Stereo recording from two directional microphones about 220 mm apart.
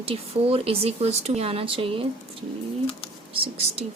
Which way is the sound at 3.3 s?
25° right (ahead or behind).